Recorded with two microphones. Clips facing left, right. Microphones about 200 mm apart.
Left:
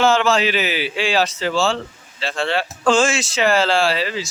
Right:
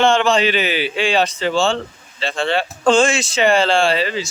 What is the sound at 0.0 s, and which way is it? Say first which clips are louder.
A man's voice: right 1 dB; 5° left (ahead or behind).